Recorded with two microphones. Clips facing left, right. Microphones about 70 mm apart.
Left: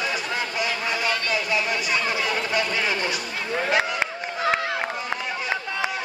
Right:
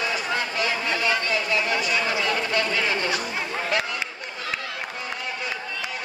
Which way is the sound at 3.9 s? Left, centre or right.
Left.